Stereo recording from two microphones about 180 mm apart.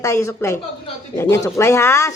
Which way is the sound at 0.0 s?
15° left (ahead or behind).